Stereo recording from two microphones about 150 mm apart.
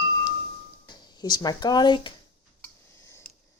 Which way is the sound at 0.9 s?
30° left (ahead or behind).